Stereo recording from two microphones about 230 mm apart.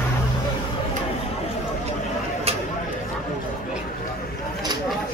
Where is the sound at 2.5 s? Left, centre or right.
Right.